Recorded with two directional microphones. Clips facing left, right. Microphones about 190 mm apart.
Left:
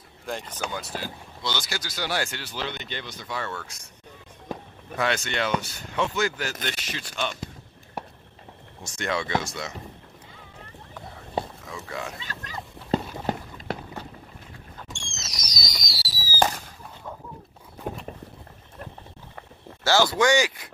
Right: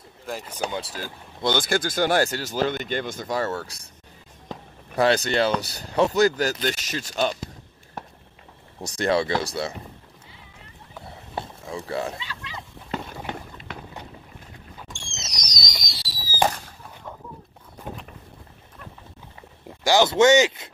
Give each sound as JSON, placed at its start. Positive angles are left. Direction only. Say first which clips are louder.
{"t": 0.2, "sound": "speech", "louder": "even", "side_deg": -5}
{"t": 0.7, "sound": "speech", "louder": "right 4 dB", "side_deg": -30}
{"t": 0.9, "sound": "speech", "louder": "left 1 dB", "side_deg": -50}
{"t": 4.9, "sound": "speech", "louder": "right 7 dB", "side_deg": -35}
{"t": 8.8, "sound": "speech", "louder": "right 7 dB", "side_deg": -35}
{"t": 11.6, "sound": "speech", "louder": "right 6 dB", "side_deg": -35}
{"t": 12.2, "sound": "a sound", "louder": "even", "side_deg": 45}
{"t": 13.3, "sound": "run", "louder": "left 6 dB", "side_deg": 40}
{"t": 14.8, "sound": "fireworks", "louder": "even", "side_deg": 0}
{"t": 19.8, "sound": "speech", "louder": "right 4 dB", "side_deg": -15}